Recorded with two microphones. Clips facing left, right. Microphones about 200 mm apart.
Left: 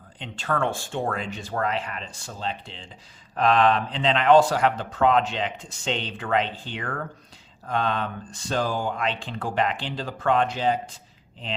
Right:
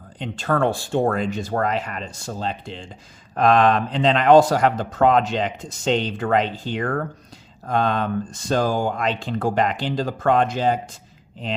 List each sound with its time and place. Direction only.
0.2 s speech: 40° right (ahead or behind)